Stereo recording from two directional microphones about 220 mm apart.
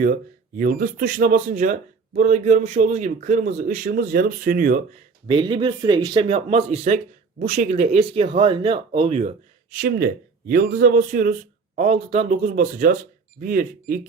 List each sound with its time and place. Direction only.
0.0 s speech: 40° right (ahead or behind)
5.3 s speech: 20° right (ahead or behind)
9.7 s speech: 40° right (ahead or behind)